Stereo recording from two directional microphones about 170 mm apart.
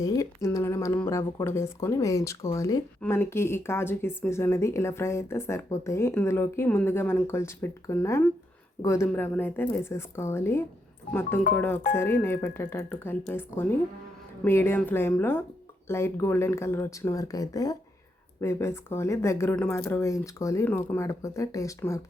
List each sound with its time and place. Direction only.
0.0 s speech: 20° left (ahead or behind)